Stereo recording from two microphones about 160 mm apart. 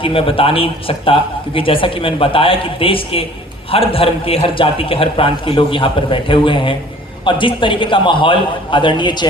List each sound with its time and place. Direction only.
0.0 s speech: 35° left (ahead or behind)